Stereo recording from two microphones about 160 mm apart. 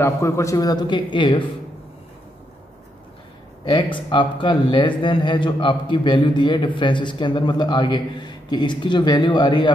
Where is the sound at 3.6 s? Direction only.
30° left (ahead or behind).